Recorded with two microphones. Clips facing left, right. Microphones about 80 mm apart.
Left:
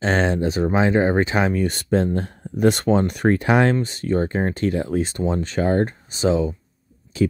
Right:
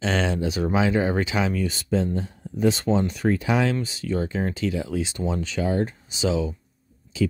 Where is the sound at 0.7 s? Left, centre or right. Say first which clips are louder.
Left 4 dB; left.